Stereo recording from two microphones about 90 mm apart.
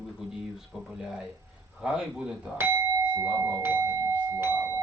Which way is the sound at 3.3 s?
35° right (ahead or behind).